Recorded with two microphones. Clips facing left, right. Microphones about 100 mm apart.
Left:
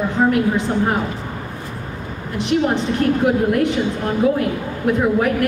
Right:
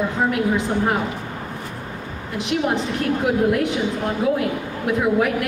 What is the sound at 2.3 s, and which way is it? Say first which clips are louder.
A woman's voice: left 3 dB; 5° right (ahead or behind).